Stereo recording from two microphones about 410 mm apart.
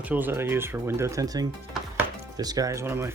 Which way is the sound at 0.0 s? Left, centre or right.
Centre.